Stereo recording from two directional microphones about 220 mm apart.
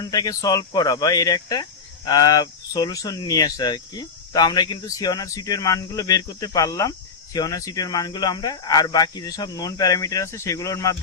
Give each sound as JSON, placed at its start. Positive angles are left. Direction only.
{"t": 0.0, "sound": "speech", "side_deg": 15}